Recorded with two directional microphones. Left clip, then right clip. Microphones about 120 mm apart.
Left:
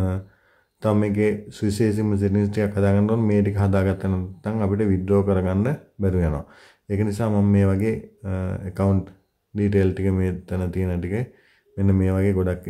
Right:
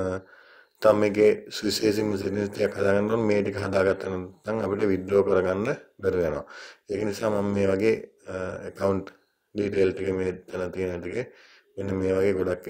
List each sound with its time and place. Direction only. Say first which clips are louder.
0.7 s a man's voice: right 3 dB; 25° right (ahead or behind)